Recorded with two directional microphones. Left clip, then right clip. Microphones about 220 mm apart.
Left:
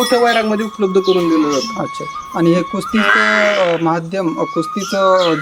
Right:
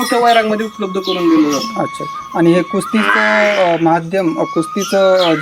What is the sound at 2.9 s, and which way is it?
Speech, 25° left (ahead or behind).